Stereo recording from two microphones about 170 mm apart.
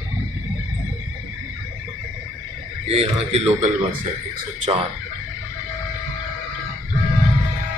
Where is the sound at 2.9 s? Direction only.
35° right (ahead or behind).